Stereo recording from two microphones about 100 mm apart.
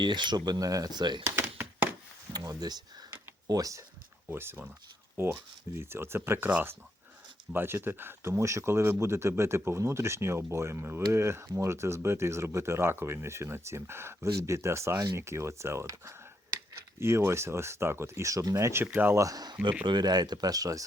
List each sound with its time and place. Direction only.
0.0 s speech: 50° right (ahead or behind)
2.3 s speech: 40° right (ahead or behind)
4.3 s speech: 20° right (ahead or behind)
19.2 s speech: 40° right (ahead or behind)